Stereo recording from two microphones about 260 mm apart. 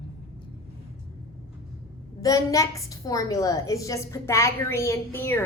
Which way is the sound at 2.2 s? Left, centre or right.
Centre.